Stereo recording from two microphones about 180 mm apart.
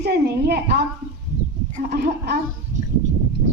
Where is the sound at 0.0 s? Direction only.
65° right (ahead or behind).